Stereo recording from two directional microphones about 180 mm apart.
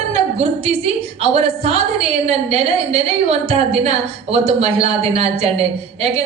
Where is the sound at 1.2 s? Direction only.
35° right (ahead or behind).